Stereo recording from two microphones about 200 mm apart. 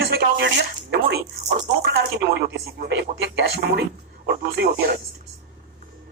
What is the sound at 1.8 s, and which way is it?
Speech, 55° right (ahead or behind).